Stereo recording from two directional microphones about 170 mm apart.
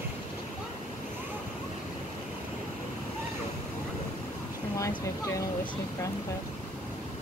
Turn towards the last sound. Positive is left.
turn(degrees=20)  # may be behind; listen again after turning